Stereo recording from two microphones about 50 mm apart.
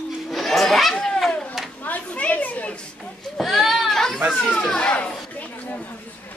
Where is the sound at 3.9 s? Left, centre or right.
Centre.